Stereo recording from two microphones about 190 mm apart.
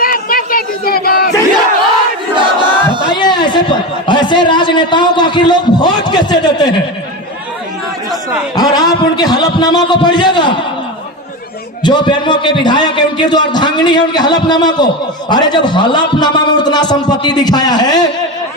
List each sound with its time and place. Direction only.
0.0 s a sound: 50° left (ahead or behind)
2.3 s battle cry: 25° right (ahead or behind)
3.2 s a sound: 25° left (ahead or behind)
4.0 s a man's voice: 25° left (ahead or behind)
8.5 s a man's voice: 20° left (ahead or behind)
11.8 s a man's voice: 25° left (ahead or behind)